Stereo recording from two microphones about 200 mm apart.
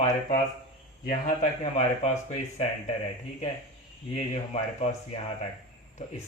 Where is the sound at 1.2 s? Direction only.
35° left (ahead or behind).